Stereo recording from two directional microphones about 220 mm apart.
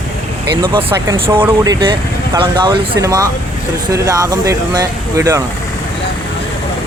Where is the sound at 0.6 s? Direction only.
20° right (ahead or behind).